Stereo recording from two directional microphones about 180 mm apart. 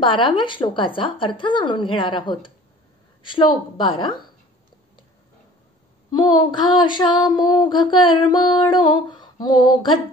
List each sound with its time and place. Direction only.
0.0 s female singing: 25° left (ahead or behind)
6.1 s female singing: 25° left (ahead or behind)